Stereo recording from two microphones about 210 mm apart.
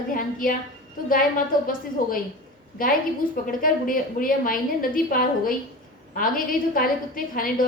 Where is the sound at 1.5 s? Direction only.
45° left (ahead or behind).